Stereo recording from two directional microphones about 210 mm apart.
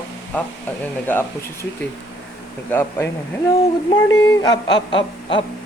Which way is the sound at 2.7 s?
10° left (ahead or behind).